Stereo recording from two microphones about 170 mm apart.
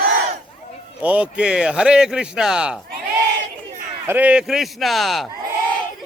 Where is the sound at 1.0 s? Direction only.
10° right (ahead or behind).